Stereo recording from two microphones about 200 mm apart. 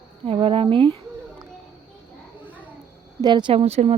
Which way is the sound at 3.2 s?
20° right (ahead or behind).